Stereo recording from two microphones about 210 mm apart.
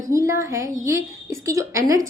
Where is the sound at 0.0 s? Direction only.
15° right (ahead or behind).